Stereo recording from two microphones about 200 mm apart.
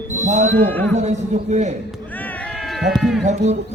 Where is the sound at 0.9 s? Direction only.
35° right (ahead or behind).